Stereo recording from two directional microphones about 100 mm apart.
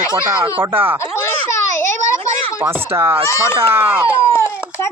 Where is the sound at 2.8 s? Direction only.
20° right (ahead or behind).